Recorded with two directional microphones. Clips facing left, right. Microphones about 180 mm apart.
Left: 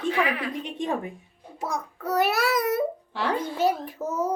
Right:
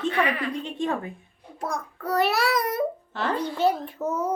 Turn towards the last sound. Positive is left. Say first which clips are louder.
# right 1 dB
turn(degrees=5)  # may be behind; listen again after turning